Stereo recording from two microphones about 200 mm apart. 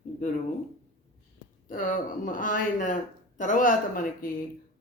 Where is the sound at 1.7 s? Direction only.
40° left (ahead or behind).